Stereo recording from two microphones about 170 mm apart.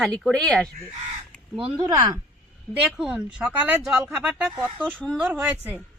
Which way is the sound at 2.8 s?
5° right (ahead or behind).